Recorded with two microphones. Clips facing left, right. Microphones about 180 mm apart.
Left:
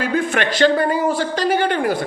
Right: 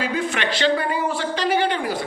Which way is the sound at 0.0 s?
50° left (ahead or behind).